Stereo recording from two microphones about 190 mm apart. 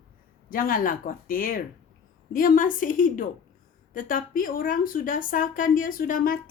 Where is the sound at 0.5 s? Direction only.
50° left (ahead or behind).